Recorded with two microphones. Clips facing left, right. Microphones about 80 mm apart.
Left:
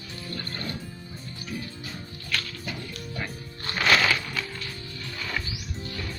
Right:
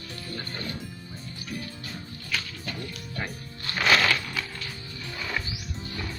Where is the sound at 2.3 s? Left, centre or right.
Centre.